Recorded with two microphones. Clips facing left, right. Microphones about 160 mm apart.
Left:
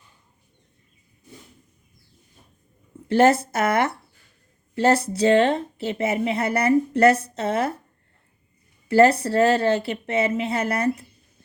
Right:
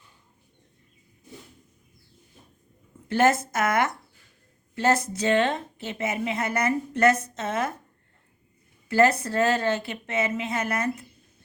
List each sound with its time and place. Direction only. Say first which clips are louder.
3.1 s a woman's voice: left 4 dB; 30° left (ahead or behind)
8.9 s a woman's voice: left 5 dB; 30° left (ahead or behind)